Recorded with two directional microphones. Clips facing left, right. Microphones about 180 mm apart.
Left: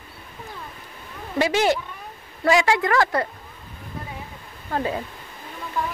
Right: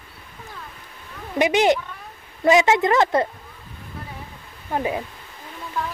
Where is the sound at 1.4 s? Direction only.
20° right (ahead or behind).